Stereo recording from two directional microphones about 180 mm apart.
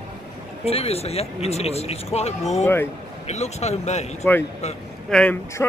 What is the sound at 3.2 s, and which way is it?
Speech, 35° left (ahead or behind).